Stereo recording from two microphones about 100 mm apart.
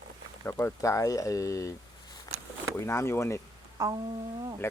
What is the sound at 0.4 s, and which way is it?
Speech, 25° left (ahead or behind).